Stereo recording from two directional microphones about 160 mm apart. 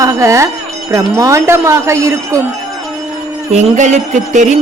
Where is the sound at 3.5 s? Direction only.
50° right (ahead or behind).